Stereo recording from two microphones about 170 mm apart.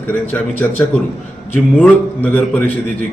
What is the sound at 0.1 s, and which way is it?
A man's voice, 10° left (ahead or behind).